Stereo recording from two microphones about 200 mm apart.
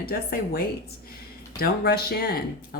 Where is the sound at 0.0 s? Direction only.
50° left (ahead or behind).